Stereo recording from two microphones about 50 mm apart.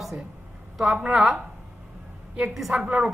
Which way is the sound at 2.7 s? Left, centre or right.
Centre.